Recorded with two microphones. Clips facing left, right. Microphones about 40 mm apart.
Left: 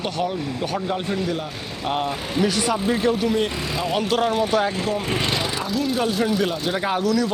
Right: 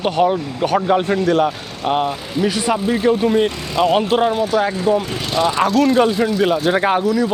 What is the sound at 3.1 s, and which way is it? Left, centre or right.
Speech, centre.